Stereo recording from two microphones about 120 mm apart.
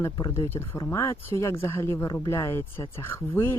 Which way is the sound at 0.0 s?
20° left (ahead or behind).